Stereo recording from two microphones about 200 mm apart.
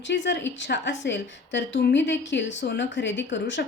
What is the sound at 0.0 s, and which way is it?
A woman's voice, 65° left (ahead or behind).